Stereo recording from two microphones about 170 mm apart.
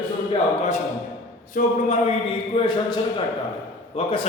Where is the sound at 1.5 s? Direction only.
40° left (ahead or behind).